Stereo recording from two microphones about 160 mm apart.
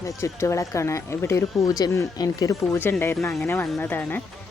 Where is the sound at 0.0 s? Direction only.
20° left (ahead or behind).